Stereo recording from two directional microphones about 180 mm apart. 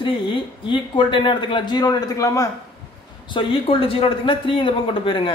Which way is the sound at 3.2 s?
30° left (ahead or behind).